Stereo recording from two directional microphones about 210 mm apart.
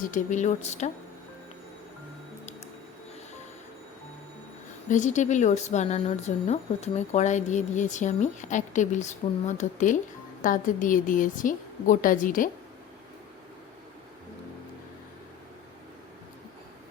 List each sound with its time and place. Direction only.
0.0 s speech: 35° left (ahead or behind)
4.9 s speech: 35° left (ahead or behind)